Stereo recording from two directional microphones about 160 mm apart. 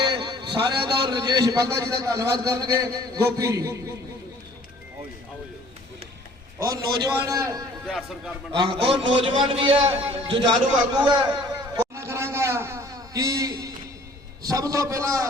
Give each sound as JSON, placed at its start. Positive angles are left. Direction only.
{"t": 0.0, "sound": "a sound", "side_deg": -90}
{"t": 0.5, "sound": "a man's voice", "side_deg": -30}
{"t": 6.6, "sound": "a man's voice", "side_deg": -25}
{"t": 7.9, "sound": "speech", "side_deg": 0}
{"t": 8.5, "sound": "a man's voice", "side_deg": -30}
{"t": 11.9, "sound": "a sound", "side_deg": -15}
{"t": 14.4, "sound": "a man's voice", "side_deg": -20}